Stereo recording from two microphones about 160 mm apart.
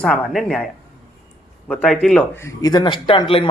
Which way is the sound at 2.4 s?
20° left (ahead or behind).